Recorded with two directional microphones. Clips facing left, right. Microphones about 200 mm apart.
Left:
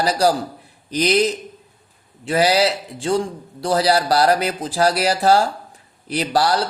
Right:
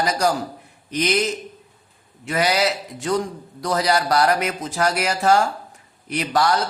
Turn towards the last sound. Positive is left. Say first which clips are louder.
# left 1 dB
turn(degrees=35)  # may be behind; listen again after turning